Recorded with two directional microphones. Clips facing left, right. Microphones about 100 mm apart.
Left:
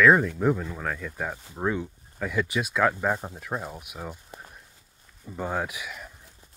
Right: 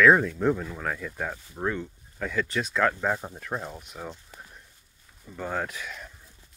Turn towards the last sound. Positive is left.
turn(degrees=5)  # may be behind; listen again after turning